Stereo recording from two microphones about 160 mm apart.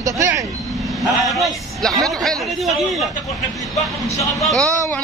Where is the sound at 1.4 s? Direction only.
Centre (ahead or behind).